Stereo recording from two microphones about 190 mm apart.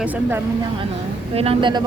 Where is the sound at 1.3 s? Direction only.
30° right (ahead or behind).